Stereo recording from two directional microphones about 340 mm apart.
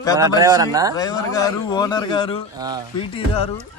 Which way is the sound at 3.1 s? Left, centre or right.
Centre.